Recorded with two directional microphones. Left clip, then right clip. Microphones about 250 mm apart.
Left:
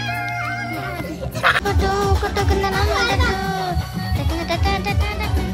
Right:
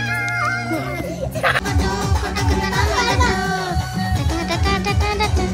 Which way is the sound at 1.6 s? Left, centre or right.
Centre.